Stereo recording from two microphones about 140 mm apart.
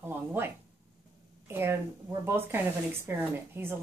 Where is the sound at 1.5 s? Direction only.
15° right (ahead or behind).